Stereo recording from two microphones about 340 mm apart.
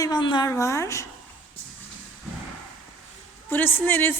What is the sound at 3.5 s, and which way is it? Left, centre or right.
Speech, centre.